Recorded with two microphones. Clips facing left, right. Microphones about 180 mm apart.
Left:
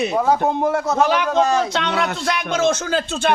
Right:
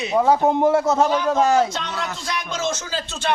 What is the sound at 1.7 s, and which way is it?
Speech, 70° left (ahead or behind).